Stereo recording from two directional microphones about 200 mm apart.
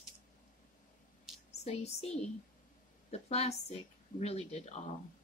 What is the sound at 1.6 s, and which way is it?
Speech, 30° left (ahead or behind).